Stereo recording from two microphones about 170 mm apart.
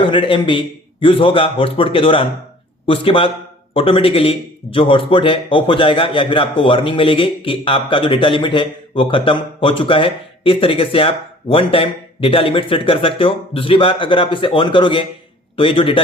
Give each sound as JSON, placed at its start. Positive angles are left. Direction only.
{"t": 0.0, "sound": "a man's voice", "side_deg": 30}